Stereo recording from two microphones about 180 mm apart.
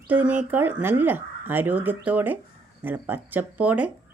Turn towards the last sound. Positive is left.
turn(degrees=-5)  # may be behind; listen again after turning